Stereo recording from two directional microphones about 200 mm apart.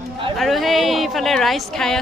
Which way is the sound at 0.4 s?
Centre (ahead or behind).